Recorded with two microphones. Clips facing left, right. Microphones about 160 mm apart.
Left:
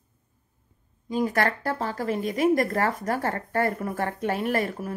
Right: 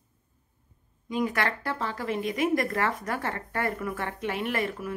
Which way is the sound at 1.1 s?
35° left (ahead or behind).